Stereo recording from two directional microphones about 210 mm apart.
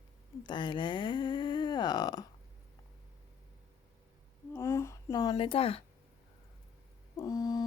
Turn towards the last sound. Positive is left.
turn(degrees=20)  # may be behind; listen again after turning